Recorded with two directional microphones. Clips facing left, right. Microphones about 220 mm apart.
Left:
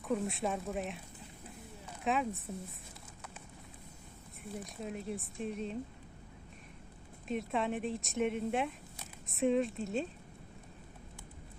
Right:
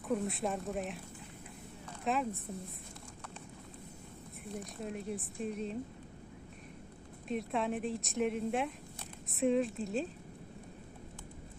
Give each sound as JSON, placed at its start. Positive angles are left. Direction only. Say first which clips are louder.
{"t": 0.1, "sound": "a woman's voice", "louder": "even", "side_deg": 0}
{"t": 2.0, "sound": "a woman's voice", "louder": "left 1 dB", "side_deg": 0}
{"t": 4.5, "sound": "a woman's voice", "louder": "even", "side_deg": 0}
{"t": 7.3, "sound": "a woman's voice", "louder": "even", "side_deg": 0}